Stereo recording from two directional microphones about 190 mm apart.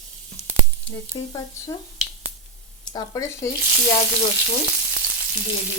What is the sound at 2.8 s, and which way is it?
Speech, 20° left (ahead or behind).